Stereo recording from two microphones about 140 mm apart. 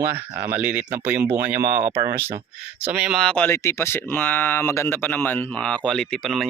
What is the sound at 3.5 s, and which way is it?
Speech, 20° left (ahead or behind).